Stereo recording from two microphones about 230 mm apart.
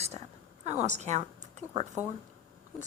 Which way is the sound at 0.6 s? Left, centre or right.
Right.